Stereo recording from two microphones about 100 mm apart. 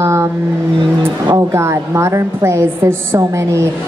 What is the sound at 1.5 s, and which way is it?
A woman's voice, 30° right (ahead or behind).